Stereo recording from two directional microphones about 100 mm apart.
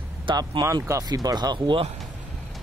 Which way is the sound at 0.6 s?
35° right (ahead or behind).